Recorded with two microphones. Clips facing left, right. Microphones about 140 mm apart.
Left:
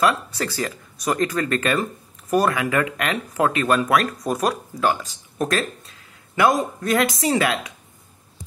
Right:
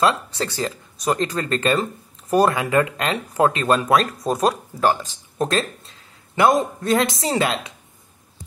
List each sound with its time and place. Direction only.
0.0 s speech: 25° right (ahead or behind)